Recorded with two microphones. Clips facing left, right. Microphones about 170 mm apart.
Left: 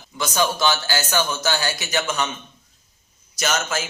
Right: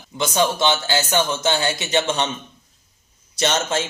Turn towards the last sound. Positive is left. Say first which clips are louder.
# right 3 dB
turn(degrees=-30)  # may be behind; listen again after turning